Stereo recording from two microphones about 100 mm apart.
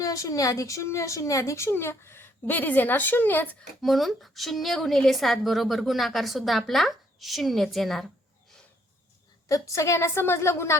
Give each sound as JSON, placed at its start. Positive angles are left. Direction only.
{"t": 0.0, "sound": "a child's voice", "side_deg": 35}
{"t": 3.8, "sound": "a woman's voice", "side_deg": 0}
{"t": 9.5, "sound": "a child's voice", "side_deg": 30}